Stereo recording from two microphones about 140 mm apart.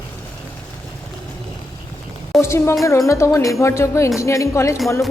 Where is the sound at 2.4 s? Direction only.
20° left (ahead or behind).